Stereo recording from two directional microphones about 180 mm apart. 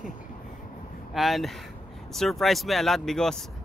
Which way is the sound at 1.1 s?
Centre (ahead or behind).